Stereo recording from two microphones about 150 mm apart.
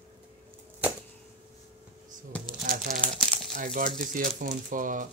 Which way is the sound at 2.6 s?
60° right (ahead or behind).